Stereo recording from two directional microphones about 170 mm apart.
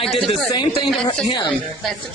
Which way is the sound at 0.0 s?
Centre (ahead or behind).